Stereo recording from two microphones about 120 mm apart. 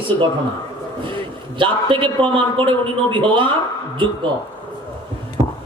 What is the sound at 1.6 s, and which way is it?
A man's voice, 45° right (ahead or behind).